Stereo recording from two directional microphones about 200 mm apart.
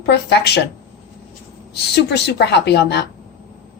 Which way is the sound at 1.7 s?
55° left (ahead or behind).